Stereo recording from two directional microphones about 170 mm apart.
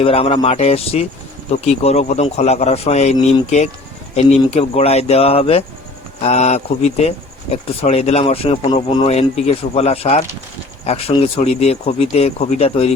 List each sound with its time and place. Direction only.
0.0 s speech: 35° left (ahead or behind)